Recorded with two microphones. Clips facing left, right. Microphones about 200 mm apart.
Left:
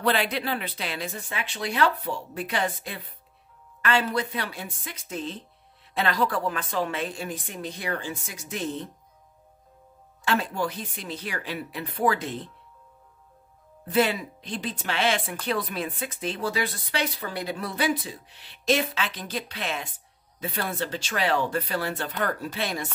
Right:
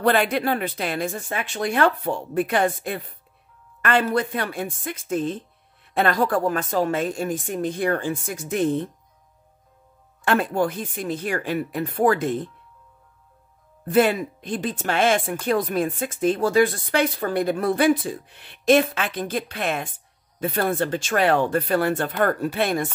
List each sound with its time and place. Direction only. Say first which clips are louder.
0.0 s speech: right 5 dB; 50° right (ahead or behind)
10.2 s speech: right 6 dB; 55° right (ahead or behind)
13.8 s speech: right 5 dB; 50° right (ahead or behind)